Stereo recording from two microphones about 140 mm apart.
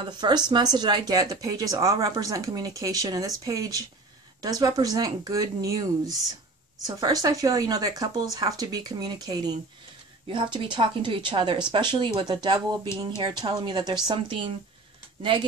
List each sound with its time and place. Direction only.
0.0 s speech: 30° right (ahead or behind)